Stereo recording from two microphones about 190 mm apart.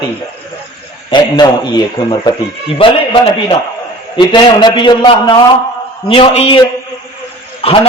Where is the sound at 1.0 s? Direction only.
20° left (ahead or behind).